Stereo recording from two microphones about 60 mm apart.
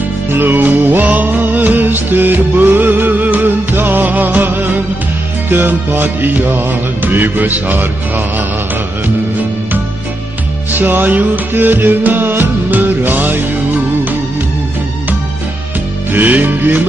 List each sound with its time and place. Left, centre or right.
0.3 s music: right
10.7 s music: right
16.1 s music: right